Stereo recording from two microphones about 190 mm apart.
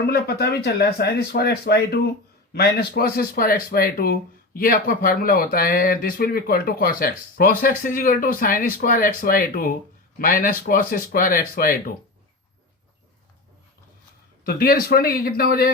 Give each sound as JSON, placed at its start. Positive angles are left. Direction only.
{"t": 0.1, "sound": "speech", "side_deg": 55}
{"t": 14.4, "sound": "speech", "side_deg": 50}